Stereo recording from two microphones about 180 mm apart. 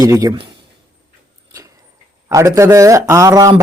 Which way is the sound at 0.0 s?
20° right (ahead or behind).